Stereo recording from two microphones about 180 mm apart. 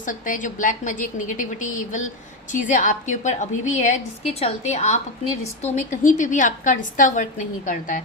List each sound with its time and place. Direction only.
0.0 s a woman's voice: 45° left (ahead or behind)